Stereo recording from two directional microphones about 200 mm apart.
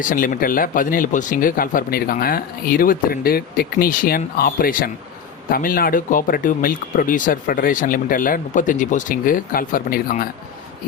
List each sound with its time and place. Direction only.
0.1 s speech: 40° left (ahead or behind)